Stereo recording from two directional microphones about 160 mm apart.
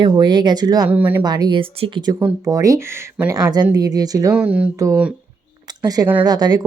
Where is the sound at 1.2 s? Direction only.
25° right (ahead or behind).